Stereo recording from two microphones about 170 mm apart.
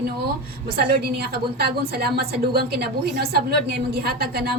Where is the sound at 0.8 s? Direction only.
65° right (ahead or behind).